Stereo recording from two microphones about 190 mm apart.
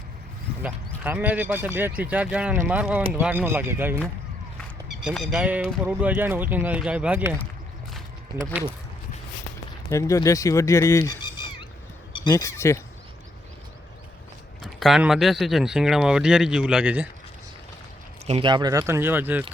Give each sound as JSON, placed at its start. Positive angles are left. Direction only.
{"t": 0.6, "sound": "speech", "side_deg": -10}
{"t": 9.9, "sound": "speech", "side_deg": 15}
{"t": 14.6, "sound": "speech", "side_deg": 0}
{"t": 18.3, "sound": "speech", "side_deg": -25}